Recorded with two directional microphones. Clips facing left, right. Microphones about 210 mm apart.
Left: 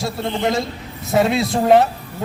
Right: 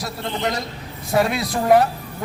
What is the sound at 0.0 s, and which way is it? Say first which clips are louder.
A man's voice: left 4 dB; 25° left (ahead or behind).